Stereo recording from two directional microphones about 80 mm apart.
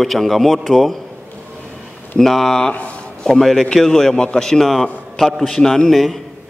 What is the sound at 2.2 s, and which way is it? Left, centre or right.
A man's voice, centre.